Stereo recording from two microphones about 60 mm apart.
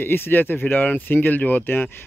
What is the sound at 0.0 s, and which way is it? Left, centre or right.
Speech, left.